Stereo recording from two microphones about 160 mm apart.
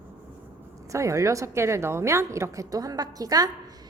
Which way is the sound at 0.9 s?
20° right (ahead or behind).